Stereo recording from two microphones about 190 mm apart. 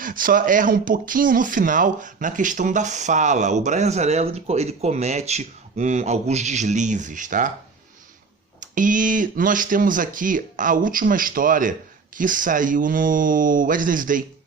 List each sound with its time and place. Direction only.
0.0 s speech: 45° right (ahead or behind)
8.7 s speech: 45° right (ahead or behind)